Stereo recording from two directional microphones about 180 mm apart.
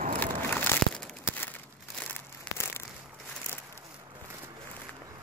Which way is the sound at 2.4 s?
15° left (ahead or behind).